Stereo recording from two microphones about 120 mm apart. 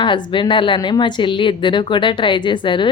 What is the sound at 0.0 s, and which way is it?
A woman's voice, 45° left (ahead or behind).